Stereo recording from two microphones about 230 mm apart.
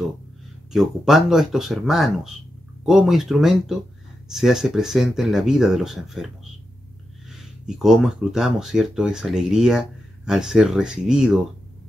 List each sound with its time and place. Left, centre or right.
0.7 s speech: centre